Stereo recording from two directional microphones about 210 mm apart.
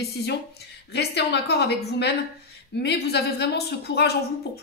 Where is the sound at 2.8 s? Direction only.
50° left (ahead or behind).